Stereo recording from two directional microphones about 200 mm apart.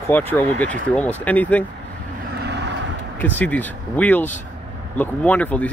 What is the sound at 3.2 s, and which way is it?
Speech, 10° left (ahead or behind).